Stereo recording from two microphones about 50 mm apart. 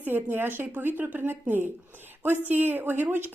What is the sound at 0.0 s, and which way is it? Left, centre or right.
A woman's voice, right.